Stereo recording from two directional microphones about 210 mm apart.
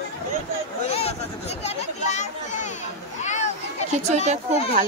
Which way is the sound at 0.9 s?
30° left (ahead or behind).